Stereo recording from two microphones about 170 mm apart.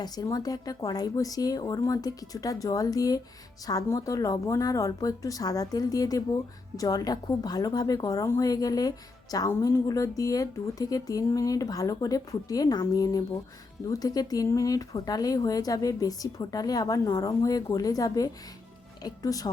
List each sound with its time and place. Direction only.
0.0 s speech: 25° left (ahead or behind)